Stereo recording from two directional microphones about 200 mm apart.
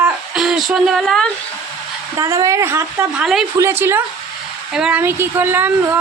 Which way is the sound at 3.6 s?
10° right (ahead or behind).